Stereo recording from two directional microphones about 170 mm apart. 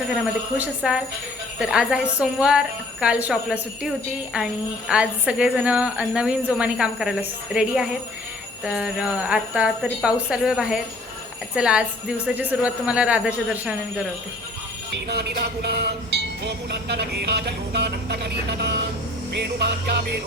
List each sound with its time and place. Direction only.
0.1 s a woman's voice: 10° right (ahead or behind)
15.0 s speech: 70° right (ahead or behind)